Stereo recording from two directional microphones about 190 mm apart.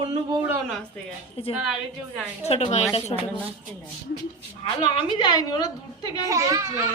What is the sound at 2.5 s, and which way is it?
Speech, 35° left (ahead or behind).